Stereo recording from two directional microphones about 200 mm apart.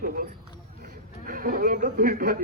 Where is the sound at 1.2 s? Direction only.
45° right (ahead or behind).